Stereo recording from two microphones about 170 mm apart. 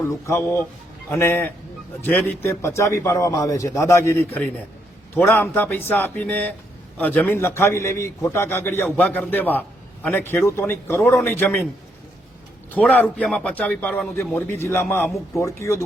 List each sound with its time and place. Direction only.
0.0 s a man's voice: 15° left (ahead or behind)
12.7 s a man's voice: 10° left (ahead or behind)